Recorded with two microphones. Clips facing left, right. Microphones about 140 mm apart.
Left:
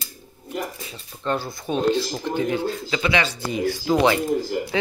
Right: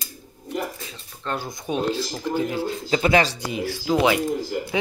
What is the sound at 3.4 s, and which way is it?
Speech, 5° right (ahead or behind).